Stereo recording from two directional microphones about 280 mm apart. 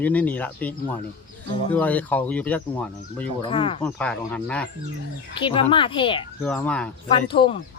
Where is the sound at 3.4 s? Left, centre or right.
Centre.